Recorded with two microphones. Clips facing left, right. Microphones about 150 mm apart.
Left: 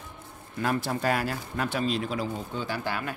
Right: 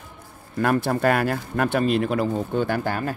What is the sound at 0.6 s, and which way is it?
Speech, 55° right (ahead or behind).